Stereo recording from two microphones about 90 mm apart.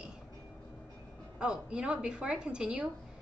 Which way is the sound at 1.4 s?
10° right (ahead or behind).